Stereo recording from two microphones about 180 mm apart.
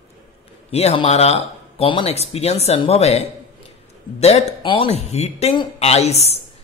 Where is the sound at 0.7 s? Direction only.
35° left (ahead or behind).